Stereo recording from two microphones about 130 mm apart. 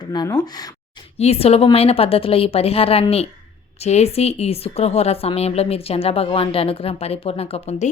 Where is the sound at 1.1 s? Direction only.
55° left (ahead or behind).